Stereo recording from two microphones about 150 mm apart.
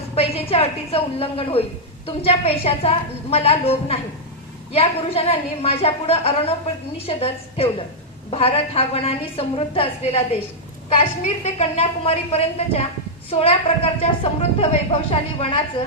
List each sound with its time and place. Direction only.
0.2 s a woman's voice: 40° left (ahead or behind)